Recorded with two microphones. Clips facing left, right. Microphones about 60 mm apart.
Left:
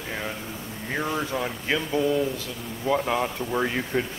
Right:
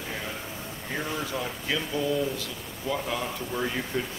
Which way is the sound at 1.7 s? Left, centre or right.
Left.